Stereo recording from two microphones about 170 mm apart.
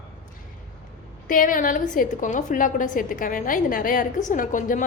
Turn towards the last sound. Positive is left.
turn(degrees=50)  # may be behind; listen again after turning